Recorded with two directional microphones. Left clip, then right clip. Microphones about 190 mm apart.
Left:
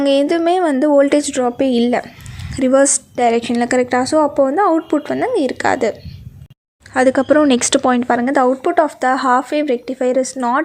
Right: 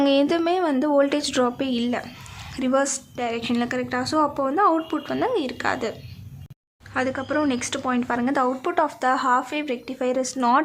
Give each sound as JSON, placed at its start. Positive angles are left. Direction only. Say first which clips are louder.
{"t": 0.0, "sound": "a woman's voice", "louder": "left 6 dB", "side_deg": 15}
{"t": 6.9, "sound": "a woman's voice", "louder": "left 12 dB", "side_deg": 25}